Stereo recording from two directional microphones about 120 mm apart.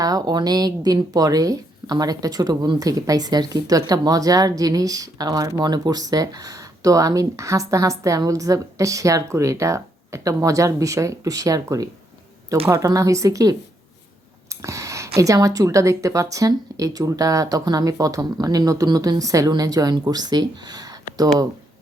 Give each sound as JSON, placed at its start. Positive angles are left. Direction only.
{"t": 0.0, "sound": "speech", "side_deg": -30}